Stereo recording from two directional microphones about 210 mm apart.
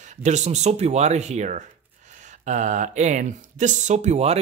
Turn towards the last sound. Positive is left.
turn(degrees=-30)  # may be behind; listen again after turning